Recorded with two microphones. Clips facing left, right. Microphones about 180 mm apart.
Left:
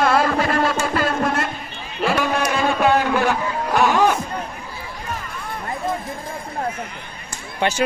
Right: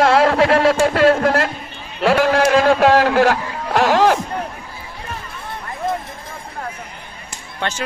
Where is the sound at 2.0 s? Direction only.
90° right.